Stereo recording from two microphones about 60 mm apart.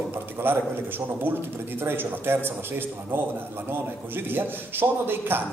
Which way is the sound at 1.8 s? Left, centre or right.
Right.